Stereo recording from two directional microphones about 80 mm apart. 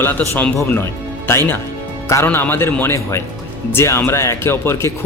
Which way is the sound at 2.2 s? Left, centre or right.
Left.